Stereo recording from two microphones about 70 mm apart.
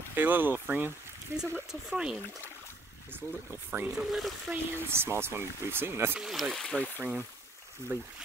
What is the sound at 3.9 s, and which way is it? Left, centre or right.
Speech, centre.